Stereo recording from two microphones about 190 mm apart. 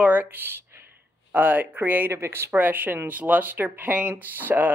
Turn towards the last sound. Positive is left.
turn(degrees=-10)  # may be behind; listen again after turning